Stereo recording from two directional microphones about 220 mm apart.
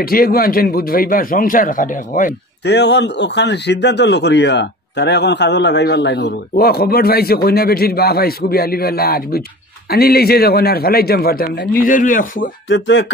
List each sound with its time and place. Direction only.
0.0 s a man's voice: 40° left (ahead or behind)
12.6 s speech: 60° left (ahead or behind)